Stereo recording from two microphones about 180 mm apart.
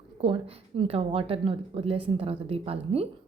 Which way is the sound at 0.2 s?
35° right (ahead or behind).